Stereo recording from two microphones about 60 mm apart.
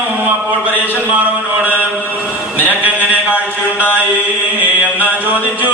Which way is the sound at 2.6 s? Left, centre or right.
Right.